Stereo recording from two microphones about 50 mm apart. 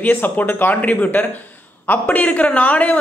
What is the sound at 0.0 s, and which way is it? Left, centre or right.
Speech, left.